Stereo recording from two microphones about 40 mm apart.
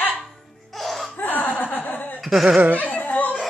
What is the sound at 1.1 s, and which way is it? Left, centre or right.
Chuckle, left.